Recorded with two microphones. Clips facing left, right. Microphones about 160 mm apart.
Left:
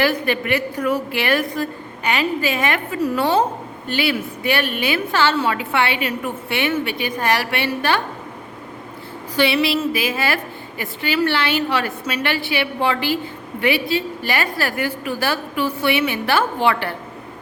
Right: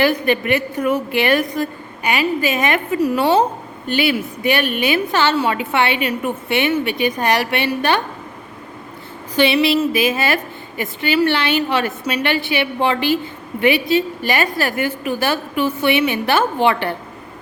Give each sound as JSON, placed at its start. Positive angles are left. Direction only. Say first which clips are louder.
{"t": 0.0, "sound": "a woman's voice", "louder": "right 3 dB", "side_deg": -20}
{"t": 9.3, "sound": "a woman's voice", "louder": "right 3 dB", "side_deg": -20}